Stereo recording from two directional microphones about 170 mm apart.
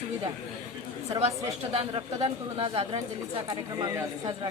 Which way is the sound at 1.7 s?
35° right (ahead or behind).